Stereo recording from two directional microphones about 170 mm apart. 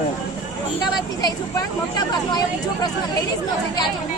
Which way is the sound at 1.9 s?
25° left (ahead or behind).